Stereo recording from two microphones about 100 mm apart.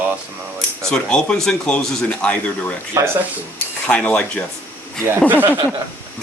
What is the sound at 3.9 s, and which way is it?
Speech, 10° left (ahead or behind).